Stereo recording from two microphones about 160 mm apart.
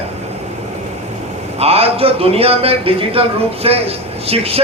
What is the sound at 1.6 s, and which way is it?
A man's voice, 40° right (ahead or behind).